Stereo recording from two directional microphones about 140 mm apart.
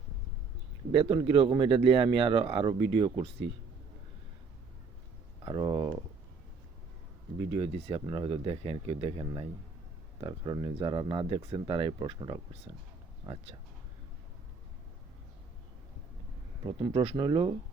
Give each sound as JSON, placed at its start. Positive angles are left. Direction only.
{"t": 0.9, "sound": "speech", "side_deg": -40}
{"t": 5.5, "sound": "speech", "side_deg": -30}
{"t": 7.6, "sound": "speech", "side_deg": -40}
{"t": 9.0, "sound": "speech", "side_deg": -25}
{"t": 16.6, "sound": "speech", "side_deg": -35}